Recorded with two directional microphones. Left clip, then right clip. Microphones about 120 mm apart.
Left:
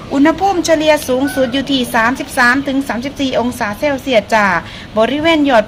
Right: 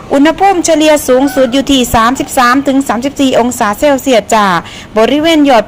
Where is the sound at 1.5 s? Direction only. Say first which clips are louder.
Right 6 dB; 35° right (ahead or behind).